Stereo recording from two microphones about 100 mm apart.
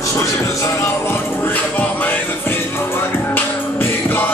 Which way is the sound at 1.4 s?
20° left (ahead or behind).